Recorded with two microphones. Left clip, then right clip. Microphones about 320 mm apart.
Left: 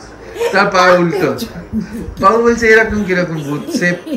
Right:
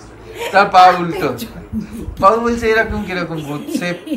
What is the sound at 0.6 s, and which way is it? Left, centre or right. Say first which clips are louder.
A man's voice: right 1 dB; centre.